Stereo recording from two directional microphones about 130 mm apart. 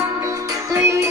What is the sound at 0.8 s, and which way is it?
Music, 25° right (ahead or behind).